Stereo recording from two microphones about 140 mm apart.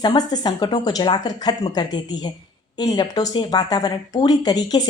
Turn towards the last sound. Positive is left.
turn(degrees=30)  # may be behind; listen again after turning